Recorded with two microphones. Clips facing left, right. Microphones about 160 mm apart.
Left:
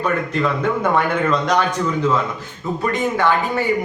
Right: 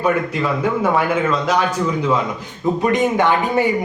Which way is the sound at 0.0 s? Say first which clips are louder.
Right 1 dB; 10° right (ahead or behind).